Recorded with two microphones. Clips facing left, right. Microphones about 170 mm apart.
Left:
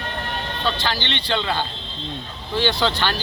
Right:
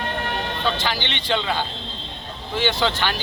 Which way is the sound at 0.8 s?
10° right (ahead or behind).